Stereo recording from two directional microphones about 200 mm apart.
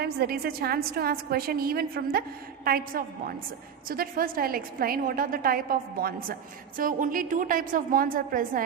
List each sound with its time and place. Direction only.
0.0 s a woman's voice: 50° right (ahead or behind)